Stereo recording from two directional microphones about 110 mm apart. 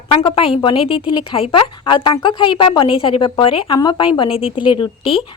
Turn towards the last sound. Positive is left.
turn(degrees=55)  # may be behind; listen again after turning